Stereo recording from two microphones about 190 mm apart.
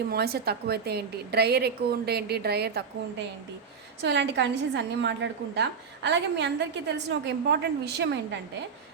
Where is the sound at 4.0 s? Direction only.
70° right (ahead or behind).